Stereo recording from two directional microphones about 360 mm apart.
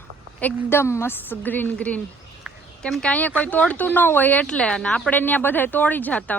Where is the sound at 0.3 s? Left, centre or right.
Centre.